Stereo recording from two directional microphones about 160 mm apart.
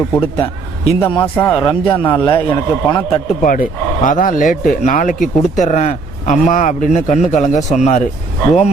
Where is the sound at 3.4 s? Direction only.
55° left (ahead or behind).